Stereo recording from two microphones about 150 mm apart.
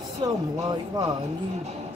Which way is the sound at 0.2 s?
30° right (ahead or behind).